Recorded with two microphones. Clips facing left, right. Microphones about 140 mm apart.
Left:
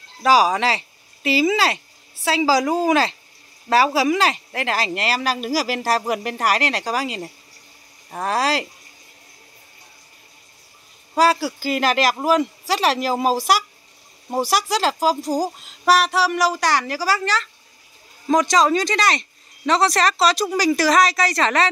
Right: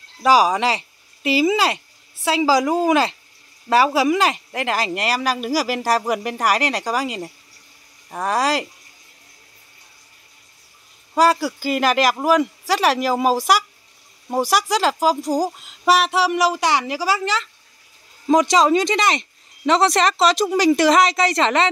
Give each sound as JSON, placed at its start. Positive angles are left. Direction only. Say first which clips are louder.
{"t": 0.2, "sound": "speech", "louder": "right 1 dB", "side_deg": -15}
{"t": 11.6, "sound": "speech", "louder": "right 1 dB", "side_deg": -10}